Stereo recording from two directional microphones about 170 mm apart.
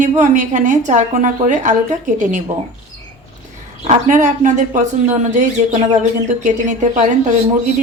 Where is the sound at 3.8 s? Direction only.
45° right (ahead or behind).